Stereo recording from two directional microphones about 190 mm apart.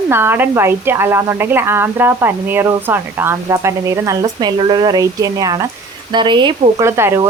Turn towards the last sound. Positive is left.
turn(degrees=-15)  # may be behind; listen again after turning